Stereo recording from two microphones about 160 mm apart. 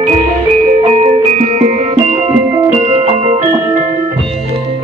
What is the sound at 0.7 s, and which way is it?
Music, 40° right (ahead or behind).